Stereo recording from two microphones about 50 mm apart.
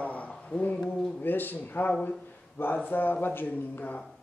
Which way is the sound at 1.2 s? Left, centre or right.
Left.